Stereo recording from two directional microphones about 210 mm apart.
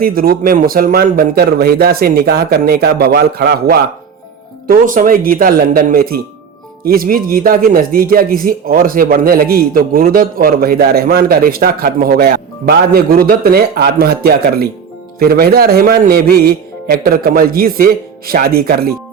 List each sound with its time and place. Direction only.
0.0 s a man's voice: 45° right (ahead or behind)